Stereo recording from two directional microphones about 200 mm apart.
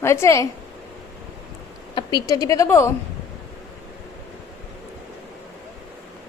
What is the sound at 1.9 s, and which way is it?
A woman's voice, 20° left (ahead or behind).